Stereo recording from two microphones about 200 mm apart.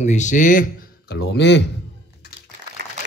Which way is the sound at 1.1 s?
60° left (ahead or behind).